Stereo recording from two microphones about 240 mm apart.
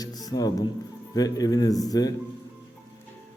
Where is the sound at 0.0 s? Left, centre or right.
Centre.